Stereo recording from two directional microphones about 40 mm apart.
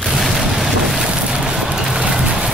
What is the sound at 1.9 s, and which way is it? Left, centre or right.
Vehicle, right.